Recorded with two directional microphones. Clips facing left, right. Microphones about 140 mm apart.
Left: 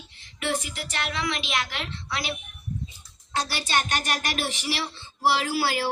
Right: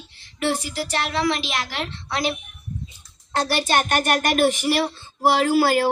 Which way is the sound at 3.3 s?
55° right (ahead or behind).